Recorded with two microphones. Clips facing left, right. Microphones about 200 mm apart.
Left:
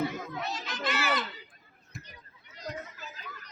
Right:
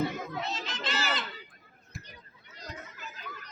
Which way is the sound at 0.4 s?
25° right (ahead or behind).